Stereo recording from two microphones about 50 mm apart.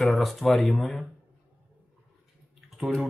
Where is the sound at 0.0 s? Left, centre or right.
Centre.